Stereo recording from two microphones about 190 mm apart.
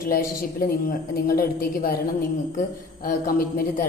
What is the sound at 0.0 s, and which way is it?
A woman's voice, 50° left (ahead or behind).